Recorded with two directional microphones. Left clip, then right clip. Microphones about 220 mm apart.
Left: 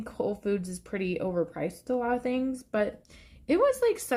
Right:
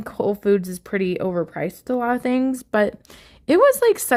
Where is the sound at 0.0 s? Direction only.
40° right (ahead or behind).